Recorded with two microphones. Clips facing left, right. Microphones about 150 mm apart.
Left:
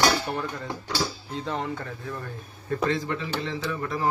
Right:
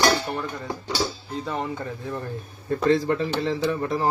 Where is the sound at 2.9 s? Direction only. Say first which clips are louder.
Right 7 dB; 40° right (ahead or behind).